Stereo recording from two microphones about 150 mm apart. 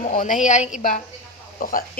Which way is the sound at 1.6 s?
75° left (ahead or behind).